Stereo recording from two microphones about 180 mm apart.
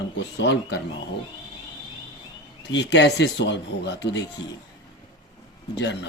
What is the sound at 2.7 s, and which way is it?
Speech, 75° left (ahead or behind).